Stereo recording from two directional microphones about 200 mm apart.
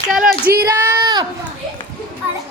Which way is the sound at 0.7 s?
15° right (ahead or behind).